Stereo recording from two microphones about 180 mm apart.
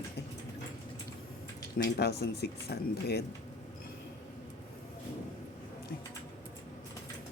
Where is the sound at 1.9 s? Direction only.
65° left (ahead or behind).